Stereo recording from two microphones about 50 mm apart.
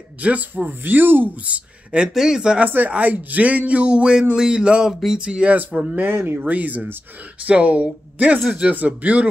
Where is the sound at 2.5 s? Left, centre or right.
Right.